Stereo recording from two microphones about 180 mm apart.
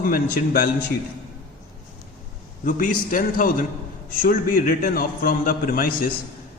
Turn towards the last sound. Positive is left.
turn(degrees=55)  # may be behind; listen again after turning